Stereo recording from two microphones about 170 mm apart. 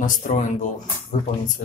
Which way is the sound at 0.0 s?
50° left (ahead or behind).